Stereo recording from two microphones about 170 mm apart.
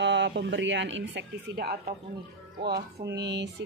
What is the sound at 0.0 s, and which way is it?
Speech, 90° right.